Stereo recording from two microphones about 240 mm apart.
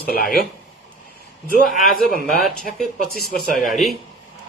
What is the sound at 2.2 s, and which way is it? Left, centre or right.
Speech, centre.